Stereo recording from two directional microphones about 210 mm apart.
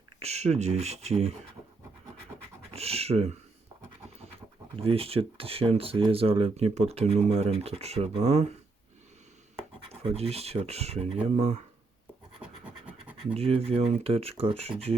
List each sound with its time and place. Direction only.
0.2 s speech: 30° right (ahead or behind)
2.7 s speech: 30° right (ahead or behind)
4.8 s speech: 25° right (ahead or behind)
9.8 s speech: 30° right (ahead or behind)
12.4 s scratch: 5° right (ahead or behind)
13.3 s speech: 30° right (ahead or behind)